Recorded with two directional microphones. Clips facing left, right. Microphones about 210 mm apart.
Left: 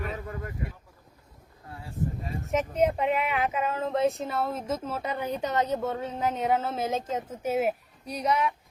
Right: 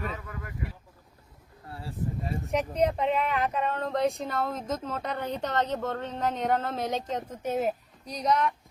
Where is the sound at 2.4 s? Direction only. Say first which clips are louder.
Left 1 dB; centre (ahead or behind).